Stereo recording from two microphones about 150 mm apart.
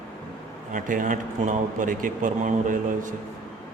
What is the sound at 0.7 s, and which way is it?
A man's voice, 60° right (ahead or behind).